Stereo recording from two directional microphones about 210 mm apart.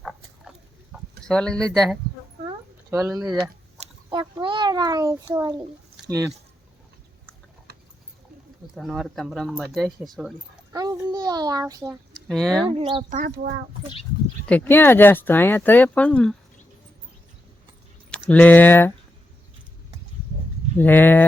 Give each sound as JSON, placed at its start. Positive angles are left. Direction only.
{"t": 0.0, "sound": "pig", "side_deg": 0}
{"t": 1.2, "sound": "speech", "side_deg": 5}
{"t": 3.8, "sound": "a child's voice", "side_deg": -20}
{"t": 7.7, "sound": "a sound", "side_deg": -50}
{"t": 8.7, "sound": "speech", "side_deg": 0}
{"t": 10.7, "sound": "a child's voice", "side_deg": -15}
{"t": 12.3, "sound": "speech", "side_deg": 5}
{"t": 12.7, "sound": "speech", "side_deg": -25}
{"t": 13.1, "sound": "a child's voice", "side_deg": -40}
{"t": 14.4, "sound": "speech", "side_deg": 10}
{"t": 18.3, "sound": "speech", "side_deg": 5}
{"t": 20.7, "sound": "speech", "side_deg": 10}